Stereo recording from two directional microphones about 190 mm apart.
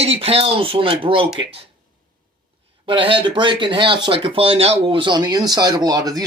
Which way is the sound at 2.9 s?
25° right (ahead or behind).